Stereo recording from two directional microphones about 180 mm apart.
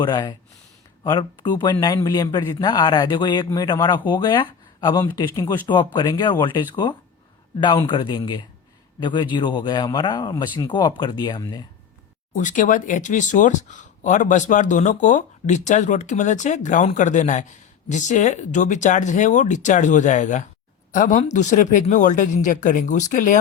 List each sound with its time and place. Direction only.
0.0 s a man's voice: 25° left (ahead or behind)
12.3 s speech: 45° left (ahead or behind)